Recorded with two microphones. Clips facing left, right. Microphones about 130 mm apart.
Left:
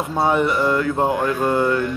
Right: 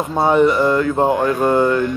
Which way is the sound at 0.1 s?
25° right (ahead or behind).